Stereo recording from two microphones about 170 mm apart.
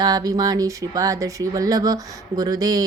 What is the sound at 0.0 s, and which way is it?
Speech, 25° right (ahead or behind).